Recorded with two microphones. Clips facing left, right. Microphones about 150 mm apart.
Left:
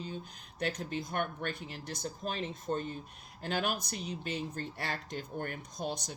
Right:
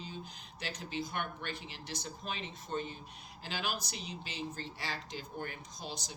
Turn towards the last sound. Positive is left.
turn(degrees=60)  # may be behind; listen again after turning